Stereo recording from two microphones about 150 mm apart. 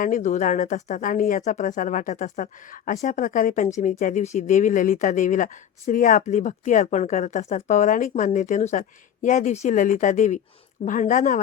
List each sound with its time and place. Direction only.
0.0 s speech: 60° left (ahead or behind)